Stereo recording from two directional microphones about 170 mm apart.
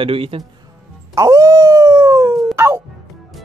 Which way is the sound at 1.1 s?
20° right (ahead or behind).